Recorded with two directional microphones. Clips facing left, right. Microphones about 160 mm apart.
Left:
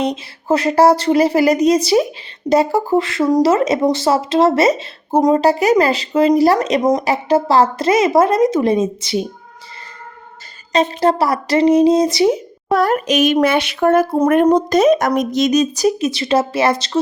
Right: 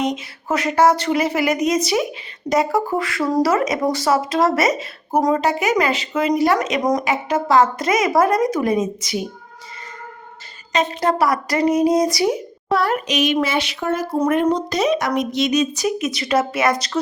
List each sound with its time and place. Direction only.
0.0 s speech: 30° left (ahead or behind)
10.7 s speech: 30° left (ahead or behind)
12.6 s speech: 45° left (ahead or behind); by 17.0 s 25° left (ahead or behind)